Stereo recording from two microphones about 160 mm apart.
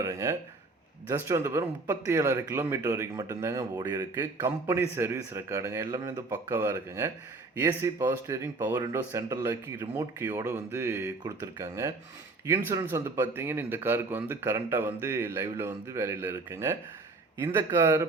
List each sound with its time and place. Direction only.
0.0 s speech: 20° right (ahead or behind)